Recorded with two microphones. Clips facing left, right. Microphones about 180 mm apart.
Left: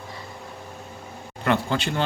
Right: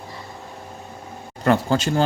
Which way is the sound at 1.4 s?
40° right (ahead or behind).